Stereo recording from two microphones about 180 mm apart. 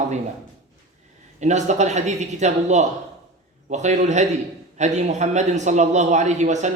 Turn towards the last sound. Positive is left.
turn(degrees=-40)  # may be behind; listen again after turning